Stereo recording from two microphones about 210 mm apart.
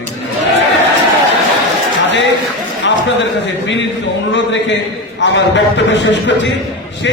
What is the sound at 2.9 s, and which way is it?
Speech, 60° left (ahead or behind).